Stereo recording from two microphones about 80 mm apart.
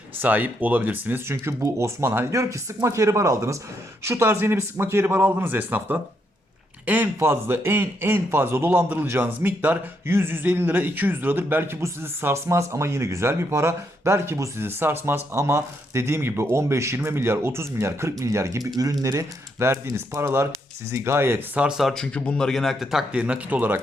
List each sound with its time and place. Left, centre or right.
0.2 s a man's voice: right
14.6 s speech: right
21.5 s speech: centre
21.8 s a man's voice: centre
23.2 s a man's voice: centre